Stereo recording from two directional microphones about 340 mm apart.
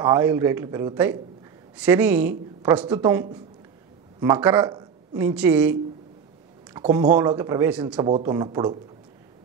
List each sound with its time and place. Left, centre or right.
0.0 s a woman's voice: centre